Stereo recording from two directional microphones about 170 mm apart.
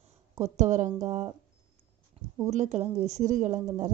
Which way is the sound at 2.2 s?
35° right (ahead or behind).